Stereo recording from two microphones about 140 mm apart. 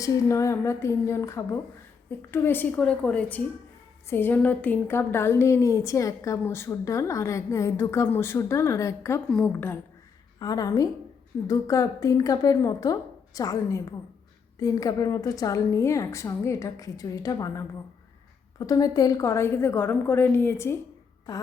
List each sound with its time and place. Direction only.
0.0 s a woman's voice: 20° left (ahead or behind)
10.4 s a woman's voice: 25° left (ahead or behind)